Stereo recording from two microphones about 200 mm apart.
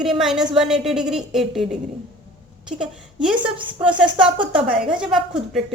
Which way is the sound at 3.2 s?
5° right (ahead or behind).